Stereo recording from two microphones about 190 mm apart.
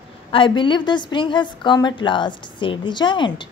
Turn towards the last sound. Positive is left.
turn(degrees=25)  # may be behind; listen again after turning